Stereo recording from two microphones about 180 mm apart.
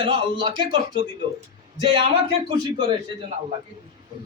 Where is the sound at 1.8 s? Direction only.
25° right (ahead or behind).